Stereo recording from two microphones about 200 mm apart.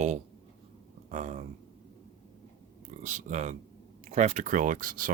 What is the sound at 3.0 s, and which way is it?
Speech, 35° right (ahead or behind).